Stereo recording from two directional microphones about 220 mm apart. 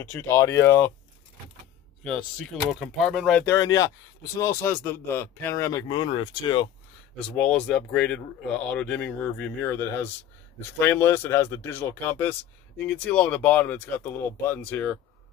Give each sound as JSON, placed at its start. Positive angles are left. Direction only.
{"t": 0.1, "sound": "speech", "side_deg": 15}
{"t": 2.0, "sound": "speech", "side_deg": 5}
{"t": 3.5, "sound": "speech", "side_deg": 15}
{"t": 7.3, "sound": "speech", "side_deg": 5}